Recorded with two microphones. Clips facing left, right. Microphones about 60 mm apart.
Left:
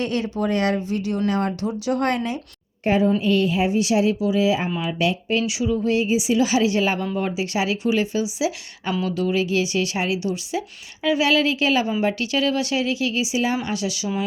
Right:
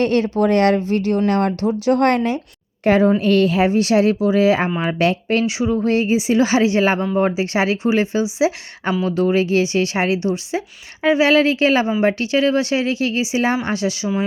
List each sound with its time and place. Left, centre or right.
0.0 s speech: right
0.8 s speech: right
2.8 s a woman's voice: right
3.2 s speech: right
5.5 s speech: right